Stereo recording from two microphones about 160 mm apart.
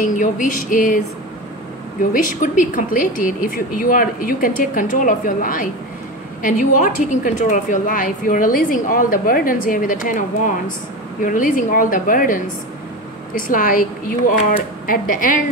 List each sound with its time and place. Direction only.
0.0 s a woman's voice: 55° left (ahead or behind)
2.1 s a woman's voice: 55° left (ahead or behind)